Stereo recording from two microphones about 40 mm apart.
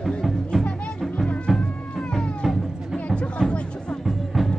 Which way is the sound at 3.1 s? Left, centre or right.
Left.